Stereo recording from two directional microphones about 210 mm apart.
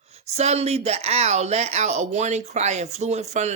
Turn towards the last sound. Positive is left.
turn(degrees=-30)  # may be behind; listen again after turning